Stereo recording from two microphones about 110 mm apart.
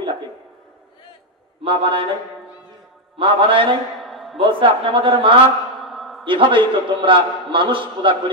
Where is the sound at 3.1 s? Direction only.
50° right (ahead or behind).